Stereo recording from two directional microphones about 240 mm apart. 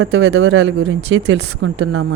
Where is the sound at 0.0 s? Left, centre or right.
Right.